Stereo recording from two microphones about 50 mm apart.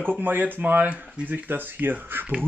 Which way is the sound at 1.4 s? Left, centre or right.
Right.